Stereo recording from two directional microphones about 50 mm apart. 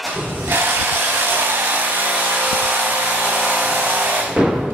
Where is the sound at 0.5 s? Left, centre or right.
Right.